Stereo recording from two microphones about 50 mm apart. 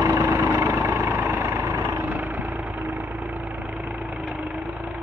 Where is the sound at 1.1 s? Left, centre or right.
Right.